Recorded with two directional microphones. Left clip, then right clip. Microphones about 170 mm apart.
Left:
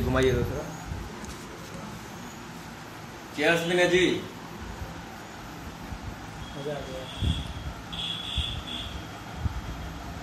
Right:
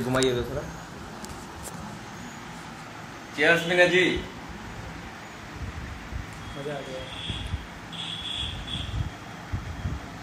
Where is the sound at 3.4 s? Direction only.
10° left (ahead or behind).